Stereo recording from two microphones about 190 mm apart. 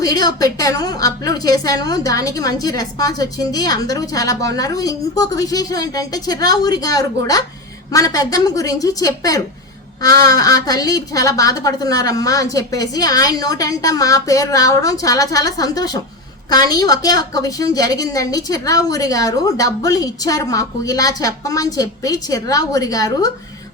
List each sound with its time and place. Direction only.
0.0 s a woman's voice: 20° left (ahead or behind)